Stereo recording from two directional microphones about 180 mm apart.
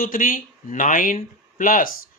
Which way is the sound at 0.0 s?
50° left (ahead or behind).